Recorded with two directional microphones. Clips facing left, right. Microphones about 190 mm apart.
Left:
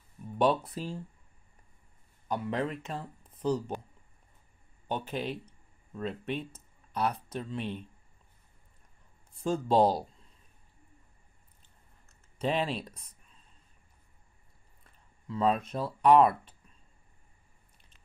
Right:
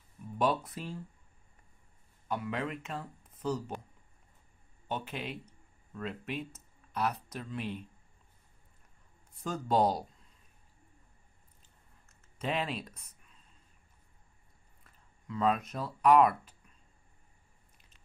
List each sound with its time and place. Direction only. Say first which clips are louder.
0.4 s speech: left 4 dB; 35° left (ahead or behind)
2.2 s speech: left 3 dB; 35° left (ahead or behind)
5.0 s speech: left 5 dB; 35° left (ahead or behind)
9.4 s speech: left 4 dB; 30° left (ahead or behind)
12.4 s speech: left 4 dB; 30° left (ahead or behind)
15.2 s speech: left 2 dB; 30° left (ahead or behind)